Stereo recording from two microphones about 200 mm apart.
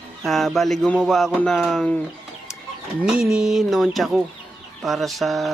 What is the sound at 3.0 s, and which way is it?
Chicken, 5° right (ahead or behind).